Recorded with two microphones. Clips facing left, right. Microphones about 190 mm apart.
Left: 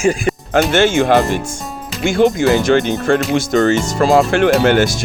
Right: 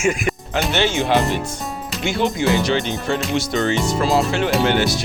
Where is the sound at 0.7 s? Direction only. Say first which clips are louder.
Left 5 dB; 50° left (ahead or behind).